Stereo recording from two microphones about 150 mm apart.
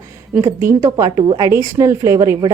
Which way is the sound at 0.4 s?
15° right (ahead or behind).